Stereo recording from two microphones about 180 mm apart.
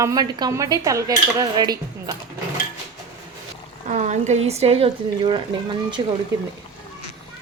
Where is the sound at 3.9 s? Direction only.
40° right (ahead or behind).